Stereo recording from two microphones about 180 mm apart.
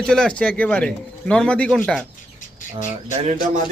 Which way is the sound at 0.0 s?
5° left (ahead or behind).